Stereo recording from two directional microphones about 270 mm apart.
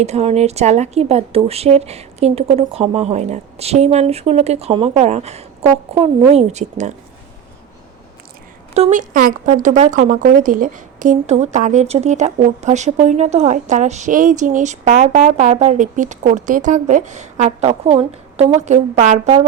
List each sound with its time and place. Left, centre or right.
0.0 s speech: right
8.7 s speech: right